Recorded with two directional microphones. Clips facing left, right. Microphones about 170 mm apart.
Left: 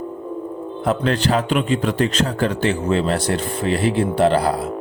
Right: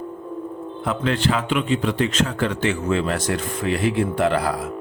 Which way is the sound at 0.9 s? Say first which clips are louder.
Left 3 dB; 40° left (ahead or behind).